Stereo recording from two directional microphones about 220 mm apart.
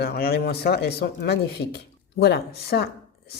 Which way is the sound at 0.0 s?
45° left (ahead or behind).